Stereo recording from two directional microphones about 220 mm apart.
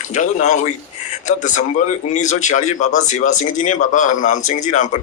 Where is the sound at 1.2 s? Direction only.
35° left (ahead or behind).